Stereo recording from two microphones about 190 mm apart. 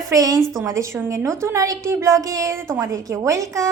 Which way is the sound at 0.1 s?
20° right (ahead or behind).